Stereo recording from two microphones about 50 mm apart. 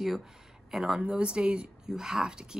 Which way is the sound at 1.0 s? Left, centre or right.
Right.